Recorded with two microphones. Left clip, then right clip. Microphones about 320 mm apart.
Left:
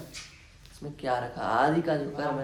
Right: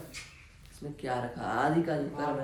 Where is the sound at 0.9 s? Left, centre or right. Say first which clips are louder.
Left 4 dB; centre.